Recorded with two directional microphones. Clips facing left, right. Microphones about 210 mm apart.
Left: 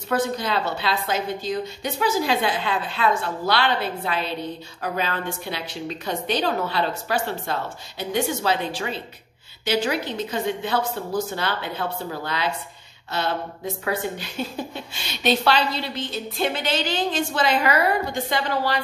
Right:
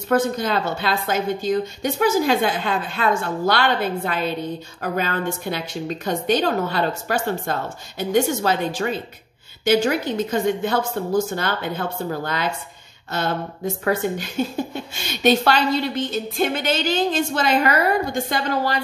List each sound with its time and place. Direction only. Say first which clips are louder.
0.1 s a woman's voice: right 4 dB; 45° right (ahead or behind)